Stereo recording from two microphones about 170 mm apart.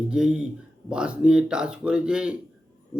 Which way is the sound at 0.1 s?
5° right (ahead or behind).